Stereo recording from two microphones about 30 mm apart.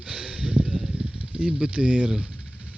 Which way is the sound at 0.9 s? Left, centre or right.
Right.